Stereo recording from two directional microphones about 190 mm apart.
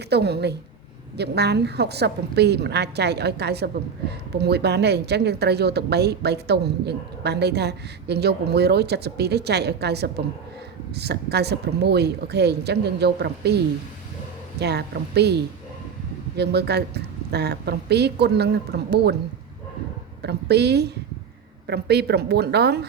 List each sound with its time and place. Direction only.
0.1 s a woman's voice: 60° right (ahead or behind)
14.6 s a woman's voice: 60° right (ahead or behind)
20.2 s a woman's voice: 60° right (ahead or behind)